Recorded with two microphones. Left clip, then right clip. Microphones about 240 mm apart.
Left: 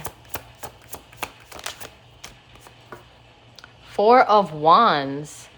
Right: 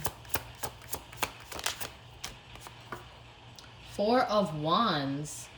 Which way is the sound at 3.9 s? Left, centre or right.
Centre.